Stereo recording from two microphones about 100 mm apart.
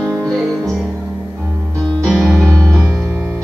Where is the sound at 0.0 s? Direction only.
30° right (ahead or behind).